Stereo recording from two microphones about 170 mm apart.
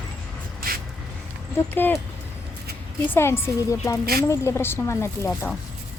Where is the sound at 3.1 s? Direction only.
15° left (ahead or behind).